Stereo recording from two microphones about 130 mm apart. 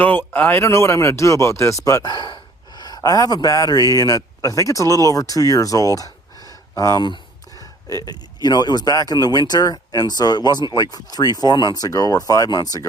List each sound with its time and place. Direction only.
0.0 s speech: 15° left (ahead or behind)